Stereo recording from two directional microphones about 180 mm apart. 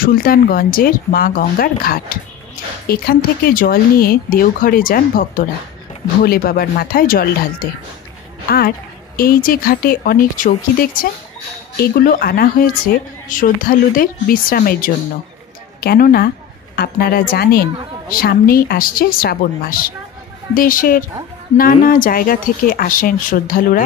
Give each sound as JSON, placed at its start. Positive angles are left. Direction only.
{"t": 0.0, "sound": "a woman's voice", "side_deg": 55}